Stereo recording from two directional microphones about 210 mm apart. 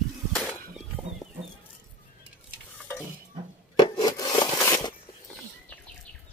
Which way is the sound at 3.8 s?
20° left (ahead or behind).